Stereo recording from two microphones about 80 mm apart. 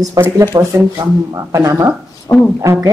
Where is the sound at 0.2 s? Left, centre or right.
Right.